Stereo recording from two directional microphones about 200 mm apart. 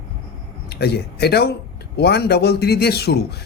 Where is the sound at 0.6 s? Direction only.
55° left (ahead or behind).